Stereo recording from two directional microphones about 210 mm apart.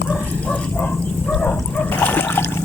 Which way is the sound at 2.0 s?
10° left (ahead or behind).